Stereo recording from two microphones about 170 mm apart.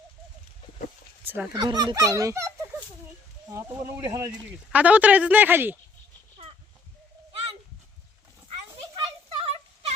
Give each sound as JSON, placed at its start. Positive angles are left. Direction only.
{"t": 1.2, "sound": "fowl", "side_deg": -10}
{"t": 1.5, "sound": "speech", "side_deg": -25}
{"t": 3.5, "sound": "a woman's voice", "side_deg": -15}
{"t": 4.7, "sound": "a woman's voice", "side_deg": -10}
{"t": 9.0, "sound": "a sound", "side_deg": -35}